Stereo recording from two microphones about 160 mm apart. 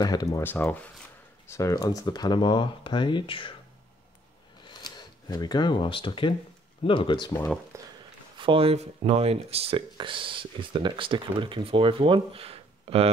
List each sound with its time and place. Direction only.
0.0 s speech: 25° left (ahead or behind)
0.4 s speech: 10° left (ahead or behind); by 3.5 s 35° left (ahead or behind)
4.6 s speech: 25° left (ahead or behind)
7.7 s speech: 20° right (ahead or behind)
8.4 s speech: 35° right (ahead or behind)